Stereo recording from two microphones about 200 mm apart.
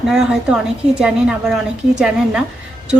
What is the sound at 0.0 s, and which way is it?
A woman's voice, 5° right (ahead or behind).